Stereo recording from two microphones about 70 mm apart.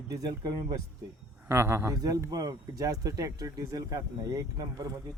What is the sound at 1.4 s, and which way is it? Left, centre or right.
Speech, right.